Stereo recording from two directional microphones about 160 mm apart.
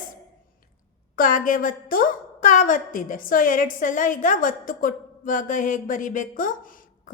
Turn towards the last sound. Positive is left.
turn(degrees=60)  # may be behind; listen again after turning